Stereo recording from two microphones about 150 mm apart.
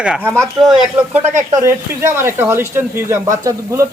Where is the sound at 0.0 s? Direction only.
10° right (ahead or behind).